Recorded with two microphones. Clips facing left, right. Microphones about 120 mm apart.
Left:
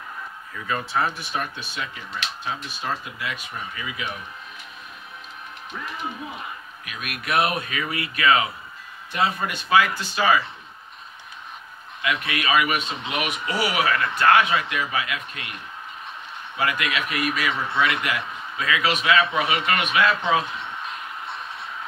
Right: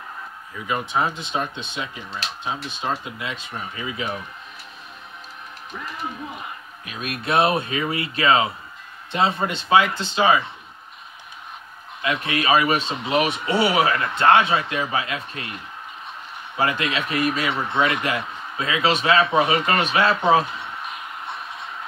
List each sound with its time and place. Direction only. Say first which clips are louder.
0.7 s speech: right 2 dB; 20° right (ahead or behind)
6.9 s speech: right 3 dB; 30° right (ahead or behind)
12.0 s speech: right 2 dB; 30° right (ahead or behind)
16.5 s speech: right 2 dB; 30° right (ahead or behind)